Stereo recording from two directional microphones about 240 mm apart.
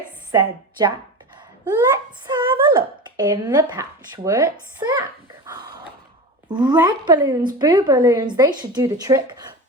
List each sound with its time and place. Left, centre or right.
0.3 s a woman's voice: centre
2.2 s speech: centre
5.5 s a sound: centre
6.5 s speech: centre